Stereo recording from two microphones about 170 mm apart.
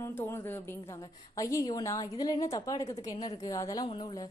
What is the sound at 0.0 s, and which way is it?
A woman's voice, 15° left (ahead or behind).